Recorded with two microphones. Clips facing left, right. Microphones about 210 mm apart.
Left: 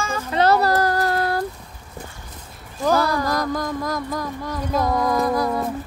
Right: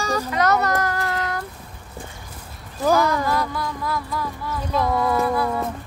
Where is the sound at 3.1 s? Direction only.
40° left (ahead or behind).